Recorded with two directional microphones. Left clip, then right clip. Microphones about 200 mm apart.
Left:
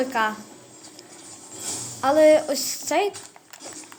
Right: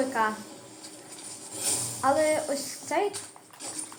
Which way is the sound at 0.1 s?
55° left (ahead or behind).